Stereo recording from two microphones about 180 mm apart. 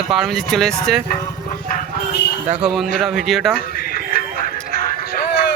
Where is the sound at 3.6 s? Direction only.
60° left (ahead or behind).